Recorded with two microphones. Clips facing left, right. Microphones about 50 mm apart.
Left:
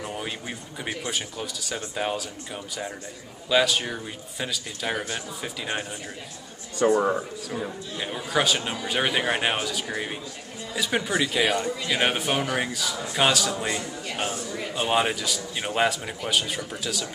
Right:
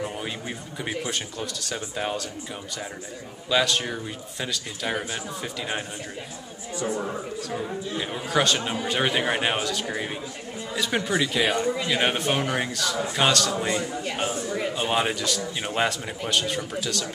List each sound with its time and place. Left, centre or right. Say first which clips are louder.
0.1 s a man's voice: even; centre
3.4 s a man's voice: left 1 dB; centre
6.8 s a man's voice: left 8 dB; left
8.0 s a man's voice: even; centre
11.6 s a man's voice: right 4 dB; centre
11.9 s a man's voice: left 2 dB; centre
13.7 s speech: right 3 dB; centre
14.8 s a man's voice: left 3 dB; centre